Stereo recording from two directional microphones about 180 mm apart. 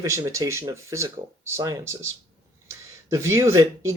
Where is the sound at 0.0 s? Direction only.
15° right (ahead or behind).